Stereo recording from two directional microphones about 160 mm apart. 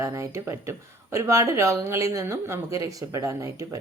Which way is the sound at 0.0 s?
20° right (ahead or behind).